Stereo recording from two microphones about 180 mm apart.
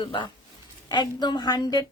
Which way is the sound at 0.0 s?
30° left (ahead or behind).